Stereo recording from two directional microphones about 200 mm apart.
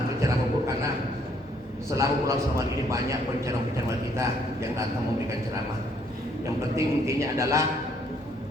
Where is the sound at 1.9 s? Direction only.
15° right (ahead or behind).